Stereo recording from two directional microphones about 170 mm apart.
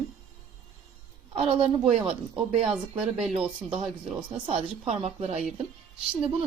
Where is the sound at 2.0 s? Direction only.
35° right (ahead or behind).